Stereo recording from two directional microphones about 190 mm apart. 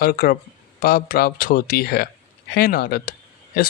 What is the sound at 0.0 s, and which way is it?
Speech, 50° left (ahead or behind).